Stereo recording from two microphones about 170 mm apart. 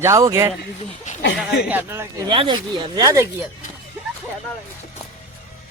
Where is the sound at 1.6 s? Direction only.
10° right (ahead or behind).